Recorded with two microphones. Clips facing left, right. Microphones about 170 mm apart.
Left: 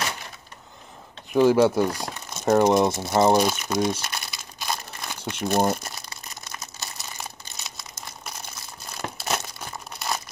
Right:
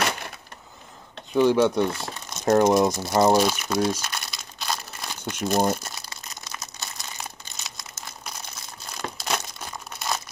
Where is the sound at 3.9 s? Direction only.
5° left (ahead or behind).